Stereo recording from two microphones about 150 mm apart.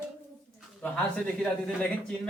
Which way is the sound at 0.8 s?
10° left (ahead or behind).